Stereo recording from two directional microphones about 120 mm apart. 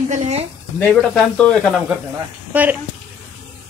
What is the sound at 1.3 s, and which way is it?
Speech, 10° left (ahead or behind).